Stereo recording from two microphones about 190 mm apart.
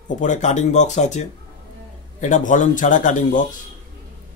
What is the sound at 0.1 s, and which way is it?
Speech, 40° left (ahead or behind).